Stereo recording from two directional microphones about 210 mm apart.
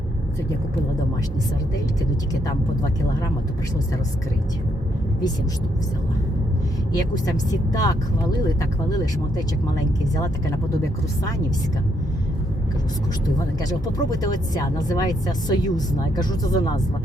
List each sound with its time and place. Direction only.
2.3 s speech: 15° left (ahead or behind)
6.9 s speech: 15° left (ahead or behind)
10.2 s speech: 15° left (ahead or behind)
13.6 s speech: 15° left (ahead or behind)